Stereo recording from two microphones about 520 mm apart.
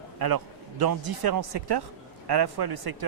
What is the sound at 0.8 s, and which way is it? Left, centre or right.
Speech, right.